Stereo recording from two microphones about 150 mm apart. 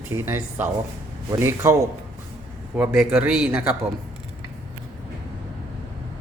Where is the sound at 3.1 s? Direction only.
5° right (ahead or behind).